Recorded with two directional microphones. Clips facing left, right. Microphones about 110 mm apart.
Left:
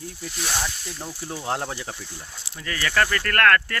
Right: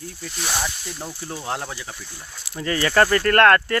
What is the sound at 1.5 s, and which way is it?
Speech, 30° left (ahead or behind).